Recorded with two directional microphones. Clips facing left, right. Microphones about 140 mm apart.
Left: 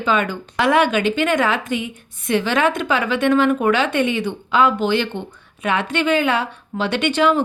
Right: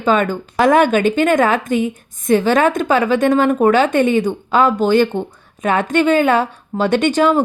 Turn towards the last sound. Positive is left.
turn(degrees=-45)  # may be behind; listen again after turning